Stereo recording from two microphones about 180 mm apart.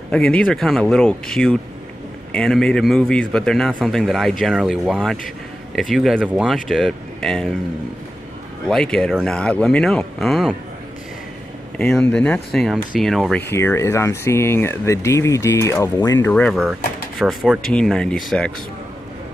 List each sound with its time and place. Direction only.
0.1 s a man's voice: 5° left (ahead or behind)
8.6 s a man's voice: 5° left (ahead or behind)
11.9 s a man's voice: 5° left (ahead or behind)
13.4 s a man's voice: 15° left (ahead or behind)